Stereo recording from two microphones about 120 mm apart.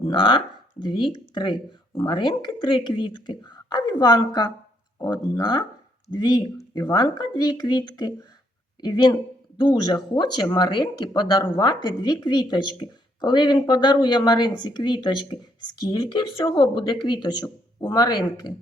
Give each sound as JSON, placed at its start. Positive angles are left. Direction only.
{"t": 0.1, "sound": "speech", "side_deg": 45}